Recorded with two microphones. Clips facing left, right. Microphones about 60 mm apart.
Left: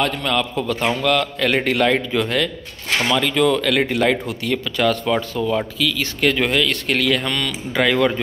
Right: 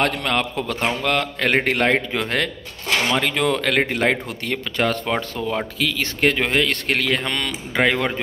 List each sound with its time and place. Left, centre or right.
0.0 s a man's voice: right
1.0 s a man's voice: right